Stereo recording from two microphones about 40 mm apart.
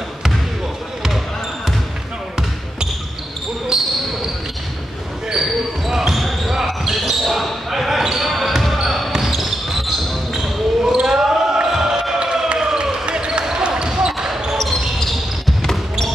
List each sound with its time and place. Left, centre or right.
3.7 s basketball bounce: centre
5.3 s basketball bounce: centre
13.0 s a sound: right
15.6 s basketball bounce: centre